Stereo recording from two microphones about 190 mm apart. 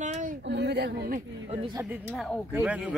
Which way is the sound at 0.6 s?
60° right (ahead or behind).